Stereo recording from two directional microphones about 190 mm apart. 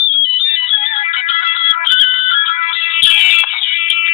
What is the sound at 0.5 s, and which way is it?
Ringtone, 35° left (ahead or behind).